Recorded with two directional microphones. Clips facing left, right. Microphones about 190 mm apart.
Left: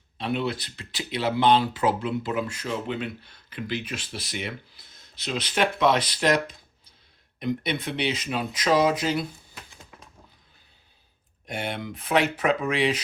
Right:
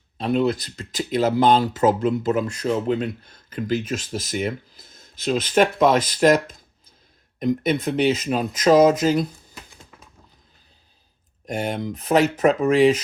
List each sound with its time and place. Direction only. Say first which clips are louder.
0.2 s speech: right 7 dB; 40° right (ahead or behind)
11.4 s speech: right 6 dB; 40° right (ahead or behind)